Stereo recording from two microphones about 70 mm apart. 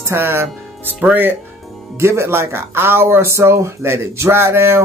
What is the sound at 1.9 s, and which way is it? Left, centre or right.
Speech, right.